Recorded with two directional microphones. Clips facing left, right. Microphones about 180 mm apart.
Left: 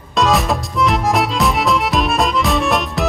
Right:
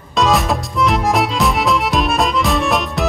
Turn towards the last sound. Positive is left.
turn(degrees=0)  # may be behind; listen again after turning